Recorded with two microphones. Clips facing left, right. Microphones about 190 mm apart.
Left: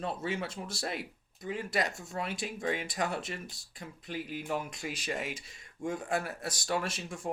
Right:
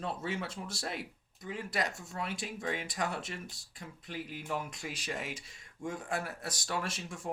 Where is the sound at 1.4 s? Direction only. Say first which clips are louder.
Left 3 dB; 15° left (ahead or behind).